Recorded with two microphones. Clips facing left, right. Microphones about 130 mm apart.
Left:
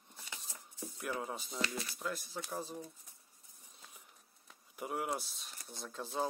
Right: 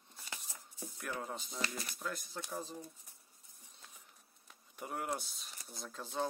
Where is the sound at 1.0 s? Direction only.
10° left (ahead or behind).